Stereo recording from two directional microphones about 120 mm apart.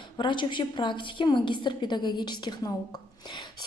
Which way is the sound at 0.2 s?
40° left (ahead or behind).